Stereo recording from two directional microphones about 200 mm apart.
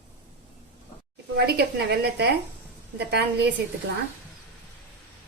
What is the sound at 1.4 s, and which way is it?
A woman's voice, 55° right (ahead or behind).